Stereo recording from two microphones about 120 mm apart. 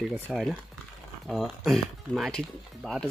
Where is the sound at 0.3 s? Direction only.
Centre (ahead or behind).